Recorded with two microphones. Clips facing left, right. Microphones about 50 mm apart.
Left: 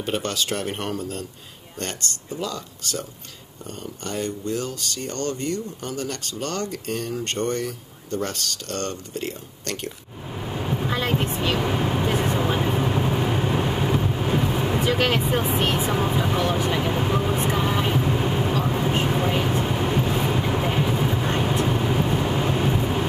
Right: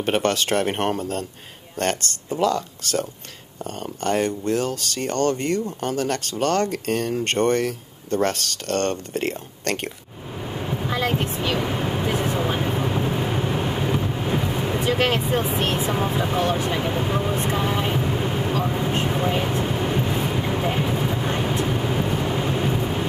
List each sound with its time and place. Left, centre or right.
0.0 s speech: right
10.5 s vehicle: centre
11.6 s speech: centre
12.0 s vehicle: centre
15.2 s speech: centre
17.2 s vehicle: centre
18.0 s vehicle: centre